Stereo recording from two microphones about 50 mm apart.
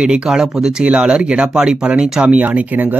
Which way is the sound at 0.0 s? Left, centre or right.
Centre.